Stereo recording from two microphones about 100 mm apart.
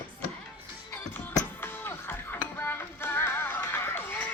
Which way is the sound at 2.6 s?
25° left (ahead or behind).